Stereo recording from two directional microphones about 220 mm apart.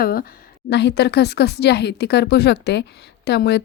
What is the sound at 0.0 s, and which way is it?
A woman's voice, 40° left (ahead or behind).